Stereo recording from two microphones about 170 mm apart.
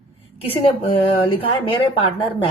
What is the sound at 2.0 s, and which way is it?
Speech, 30° left (ahead or behind).